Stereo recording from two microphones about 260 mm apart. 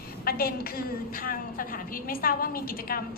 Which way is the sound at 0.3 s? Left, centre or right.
Left.